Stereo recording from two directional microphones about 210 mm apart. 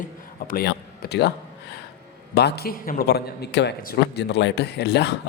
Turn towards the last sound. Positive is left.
turn(degrees=50)  # may be behind; listen again after turning